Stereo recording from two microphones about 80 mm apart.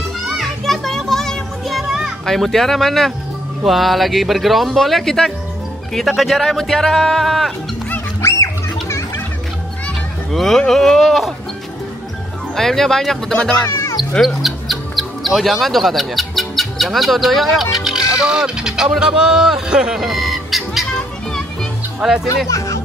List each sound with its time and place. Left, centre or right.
0.4 s children playing: centre
3.6 s speech: centre
8.2 s children playing: left
10.3 s speech: centre
12.5 s speech: centre
13.7 s music: left
14.2 s speech: centre
22.0 s speech: centre